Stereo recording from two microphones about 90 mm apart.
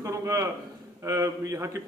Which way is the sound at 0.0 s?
35° right (ahead or behind).